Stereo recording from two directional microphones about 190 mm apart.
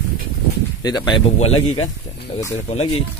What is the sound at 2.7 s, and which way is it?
Speech, 35° left (ahead or behind).